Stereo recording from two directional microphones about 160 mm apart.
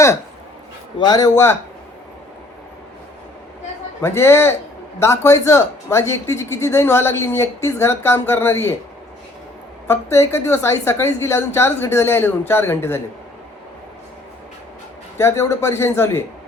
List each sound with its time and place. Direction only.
0.9 s speech: 25° left (ahead or behind)
4.0 s a man's voice: 15° left (ahead or behind)
9.8 s a man's voice: 15° left (ahead or behind)
15.2 s a man's voice: 15° left (ahead or behind)